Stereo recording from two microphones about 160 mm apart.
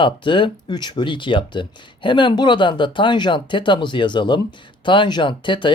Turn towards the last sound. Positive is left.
turn(degrees=30)  # may be behind; listen again after turning